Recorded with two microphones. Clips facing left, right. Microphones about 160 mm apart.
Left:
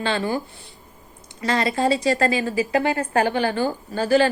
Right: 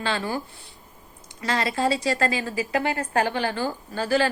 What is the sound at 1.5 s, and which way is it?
A woman's voice, 5° right (ahead or behind).